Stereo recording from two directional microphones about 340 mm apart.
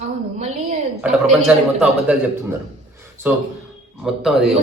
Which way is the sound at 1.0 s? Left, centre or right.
Centre.